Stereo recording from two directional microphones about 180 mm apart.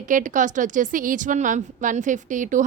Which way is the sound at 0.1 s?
45° right (ahead or behind).